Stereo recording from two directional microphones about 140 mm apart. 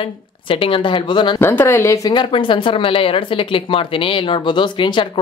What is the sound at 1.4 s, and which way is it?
Speech, 15° left (ahead or behind).